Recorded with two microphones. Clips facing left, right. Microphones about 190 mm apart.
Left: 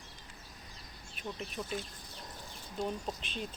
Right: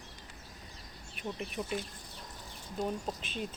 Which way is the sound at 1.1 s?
60° right (ahead or behind).